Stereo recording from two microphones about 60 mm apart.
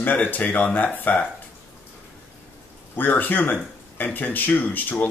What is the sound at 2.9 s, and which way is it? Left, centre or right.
Speech, left.